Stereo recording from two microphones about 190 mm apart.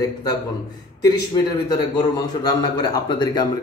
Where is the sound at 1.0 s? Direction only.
20° left (ahead or behind).